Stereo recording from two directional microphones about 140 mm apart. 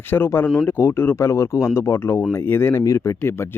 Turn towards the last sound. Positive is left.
turn(degrees=15)  # may be behind; listen again after turning